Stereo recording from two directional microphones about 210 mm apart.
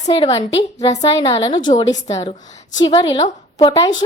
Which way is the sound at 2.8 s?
30° left (ahead or behind).